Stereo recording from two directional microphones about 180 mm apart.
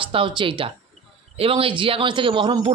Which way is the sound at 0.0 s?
30° right (ahead or behind).